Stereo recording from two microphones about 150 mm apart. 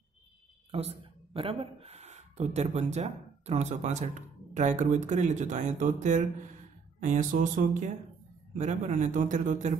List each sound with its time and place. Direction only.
0.7 s a man's voice: 40° right (ahead or behind); by 9.8 s 60° right (ahead or behind)